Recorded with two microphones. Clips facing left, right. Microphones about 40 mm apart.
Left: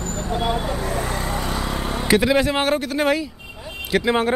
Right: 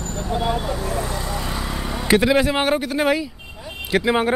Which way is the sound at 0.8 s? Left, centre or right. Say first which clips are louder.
Left 1 dB; left.